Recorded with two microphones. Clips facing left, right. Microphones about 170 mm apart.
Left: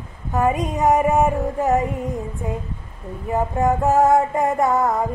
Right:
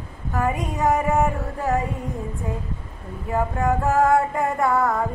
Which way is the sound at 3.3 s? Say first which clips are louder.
Left 2 dB; 20° left (ahead or behind).